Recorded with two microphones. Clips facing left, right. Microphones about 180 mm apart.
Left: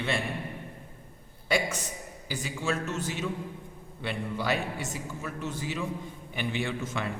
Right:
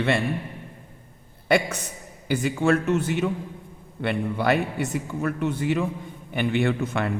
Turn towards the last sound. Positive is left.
turn(degrees=-60)  # may be behind; listen again after turning